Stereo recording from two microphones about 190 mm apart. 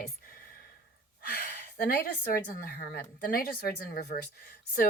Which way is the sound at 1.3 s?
55° left (ahead or behind).